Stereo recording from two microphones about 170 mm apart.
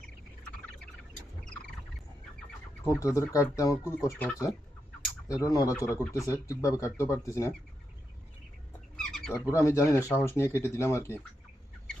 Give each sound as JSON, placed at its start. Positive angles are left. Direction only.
{"t": 2.8, "sound": "speech", "side_deg": 20}
{"t": 9.0, "sound": "a sound", "side_deg": 0}
{"t": 9.3, "sound": "speech", "side_deg": 15}